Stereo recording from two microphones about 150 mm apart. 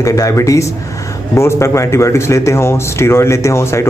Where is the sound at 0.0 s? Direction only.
20° left (ahead or behind).